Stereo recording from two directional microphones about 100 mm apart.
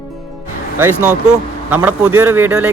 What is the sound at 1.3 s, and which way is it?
Speech, 15° right (ahead or behind).